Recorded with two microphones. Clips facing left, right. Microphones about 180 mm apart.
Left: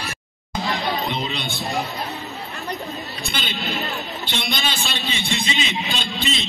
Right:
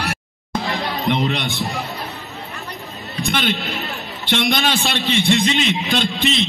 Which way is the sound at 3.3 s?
75° right (ahead or behind).